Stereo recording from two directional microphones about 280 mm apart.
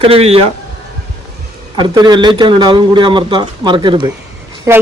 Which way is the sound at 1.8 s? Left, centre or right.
Centre.